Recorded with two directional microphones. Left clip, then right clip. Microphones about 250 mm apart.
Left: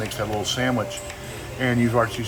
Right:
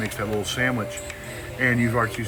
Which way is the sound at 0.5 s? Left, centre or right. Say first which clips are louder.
Left 1 dB; centre.